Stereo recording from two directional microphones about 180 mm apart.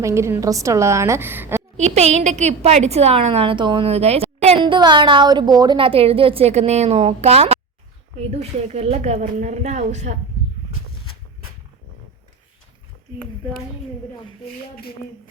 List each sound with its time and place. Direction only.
0.0 s a woman's voice: 15° right (ahead or behind)
1.7 s a woman's voice: 40° right (ahead or behind)